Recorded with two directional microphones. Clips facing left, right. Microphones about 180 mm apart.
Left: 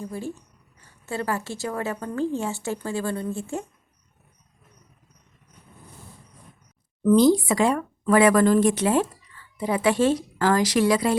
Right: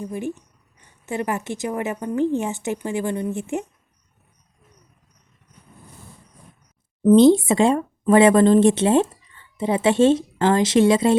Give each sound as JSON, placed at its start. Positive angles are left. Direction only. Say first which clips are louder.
{"t": 0.0, "sound": "speech", "louder": "right 4 dB", "side_deg": -20}
{"t": 7.0, "sound": "speech", "louder": "right 5 dB", "side_deg": -25}